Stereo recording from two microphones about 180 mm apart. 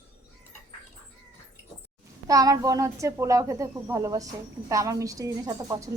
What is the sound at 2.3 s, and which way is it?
A woman's voice, 20° right (ahead or behind).